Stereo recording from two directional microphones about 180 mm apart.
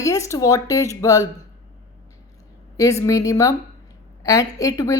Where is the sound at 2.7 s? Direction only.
20° left (ahead or behind).